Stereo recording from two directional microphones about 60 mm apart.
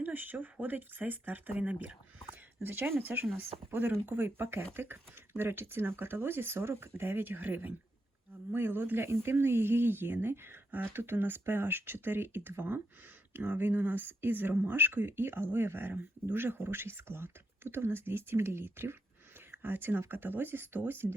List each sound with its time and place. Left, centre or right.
0.0 s speech: right
2.6 s speech: right